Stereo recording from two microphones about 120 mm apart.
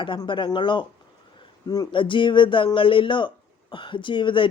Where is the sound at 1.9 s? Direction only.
45° left (ahead or behind).